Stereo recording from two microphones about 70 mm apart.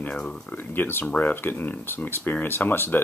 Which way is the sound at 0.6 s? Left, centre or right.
Left.